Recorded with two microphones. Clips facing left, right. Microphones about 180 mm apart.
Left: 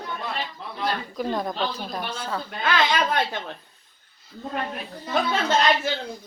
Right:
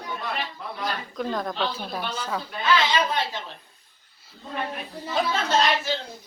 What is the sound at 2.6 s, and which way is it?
Speech, 55° left (ahead or behind).